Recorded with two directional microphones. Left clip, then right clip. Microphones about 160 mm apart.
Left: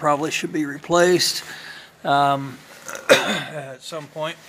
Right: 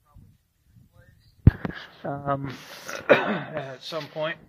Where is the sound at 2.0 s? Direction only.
30° left (ahead or behind).